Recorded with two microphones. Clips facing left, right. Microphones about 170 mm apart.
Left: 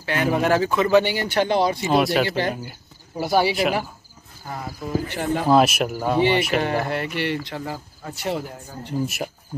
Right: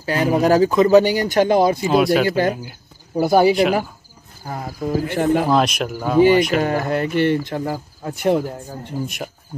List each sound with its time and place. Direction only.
0.0 s speech: 35° right (ahead or behind)
1.9 s speech: centre (ahead or behind)
2.2 s speech: 50° right (ahead or behind)
2.5 s speech: centre (ahead or behind)
3.2 s speech: 50° right (ahead or behind)
5.5 s speech: 5° left (ahead or behind)
6.6 s speech: 45° right (ahead or behind)
9.0 s speech: 5° left (ahead or behind)